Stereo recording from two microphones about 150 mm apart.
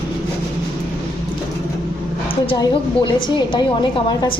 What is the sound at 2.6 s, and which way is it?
A woman's voice, 30° left (ahead or behind).